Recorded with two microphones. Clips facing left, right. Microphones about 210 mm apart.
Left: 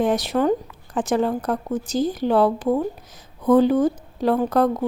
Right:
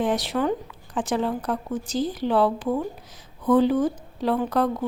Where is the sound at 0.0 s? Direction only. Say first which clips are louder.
Left 4 dB; 45° left (ahead or behind).